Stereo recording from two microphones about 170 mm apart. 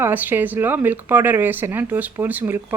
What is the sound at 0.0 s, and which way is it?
Speech, 10° right (ahead or behind).